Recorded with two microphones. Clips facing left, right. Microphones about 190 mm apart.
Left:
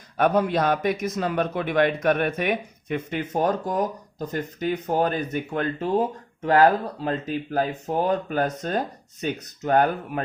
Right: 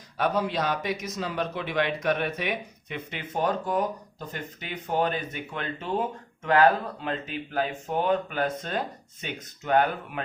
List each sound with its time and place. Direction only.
0.2 s a man's voice: 55° left (ahead or behind)